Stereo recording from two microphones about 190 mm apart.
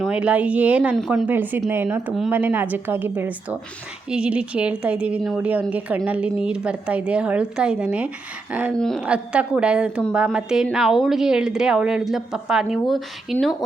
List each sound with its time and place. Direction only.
0.0 s a woman's voice: 5° right (ahead or behind)